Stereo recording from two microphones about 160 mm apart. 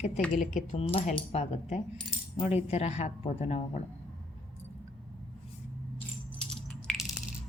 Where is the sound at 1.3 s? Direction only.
40° left (ahead or behind).